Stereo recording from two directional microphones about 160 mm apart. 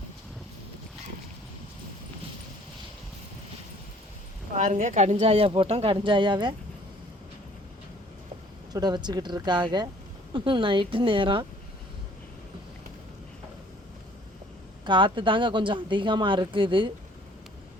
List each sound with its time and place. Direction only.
4.5 s a woman's voice: 50° right (ahead or behind); by 6.5 s 25° right (ahead or behind)
8.7 s a woman's voice: 25° right (ahead or behind)
14.8 s a woman's voice: 30° right (ahead or behind)